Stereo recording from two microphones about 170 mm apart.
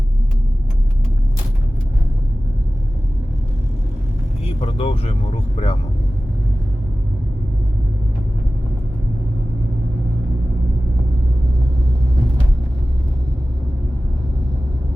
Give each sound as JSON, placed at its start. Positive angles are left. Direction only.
{"t": 4.4, "sound": "vehicle", "side_deg": 35}